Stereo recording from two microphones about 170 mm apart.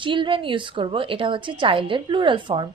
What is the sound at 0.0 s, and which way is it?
A woman's voice, 30° right (ahead or behind).